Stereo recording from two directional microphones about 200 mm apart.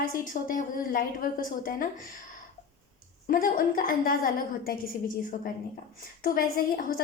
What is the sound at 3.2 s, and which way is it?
A woman's voice, 45° left (ahead or behind).